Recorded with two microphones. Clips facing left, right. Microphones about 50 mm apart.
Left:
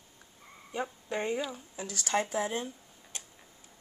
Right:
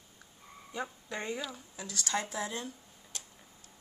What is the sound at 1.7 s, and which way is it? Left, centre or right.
Speech, left.